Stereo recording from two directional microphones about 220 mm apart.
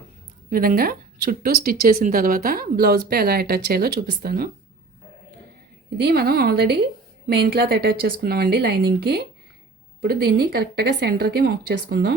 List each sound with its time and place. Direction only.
0.5 s speech: 40° right (ahead or behind)
6.0 s speech: 45° right (ahead or behind)